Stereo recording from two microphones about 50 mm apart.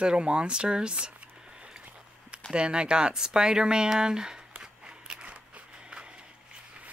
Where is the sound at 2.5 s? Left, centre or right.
Right.